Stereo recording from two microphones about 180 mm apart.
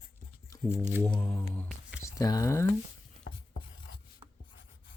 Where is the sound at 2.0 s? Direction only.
20° left (ahead or behind).